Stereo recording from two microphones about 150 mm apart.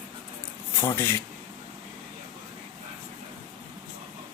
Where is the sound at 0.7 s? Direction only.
15° left (ahead or behind).